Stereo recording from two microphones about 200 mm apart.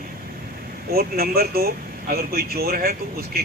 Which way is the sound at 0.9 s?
50° right (ahead or behind).